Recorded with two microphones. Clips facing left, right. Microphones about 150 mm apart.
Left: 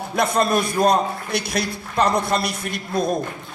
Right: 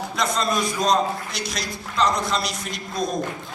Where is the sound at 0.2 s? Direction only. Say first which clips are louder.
Left 5 dB; 55° left (ahead or behind).